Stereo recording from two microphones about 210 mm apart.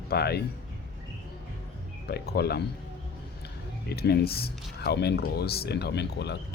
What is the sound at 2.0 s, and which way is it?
Speech, 50° left (ahead or behind).